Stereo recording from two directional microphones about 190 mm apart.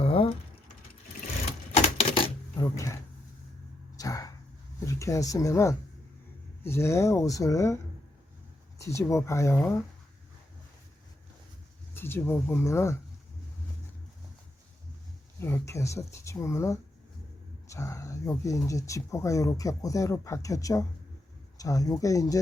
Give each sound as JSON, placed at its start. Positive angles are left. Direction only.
{"t": 0.0, "sound": "typing", "side_deg": 30}
{"t": 1.7, "sound": "typewriter", "side_deg": 30}
{"t": 2.6, "sound": "speech", "side_deg": 15}
{"t": 3.9, "sound": "a sound", "side_deg": 20}
{"t": 4.9, "sound": "speech", "side_deg": 15}
{"t": 8.8, "sound": "speech", "side_deg": 15}
{"t": 11.9, "sound": "speech", "side_deg": 10}
{"t": 15.4, "sound": "speech", "side_deg": 10}